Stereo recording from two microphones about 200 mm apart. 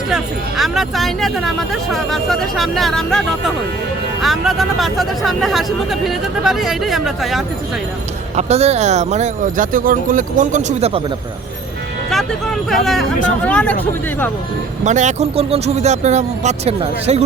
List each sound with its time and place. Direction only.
0.1 s speech: centre (ahead or behind)
8.4 s speech: 30° right (ahead or behind)
12.1 s speech: centre (ahead or behind)
14.8 s speech: 35° right (ahead or behind)